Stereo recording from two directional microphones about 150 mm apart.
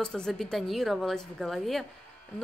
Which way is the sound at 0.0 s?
5° left (ahead or behind).